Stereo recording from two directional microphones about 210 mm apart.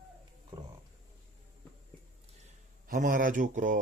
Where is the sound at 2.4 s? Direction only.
40° right (ahead or behind).